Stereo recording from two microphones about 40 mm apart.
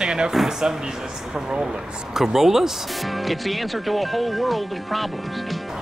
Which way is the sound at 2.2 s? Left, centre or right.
Centre.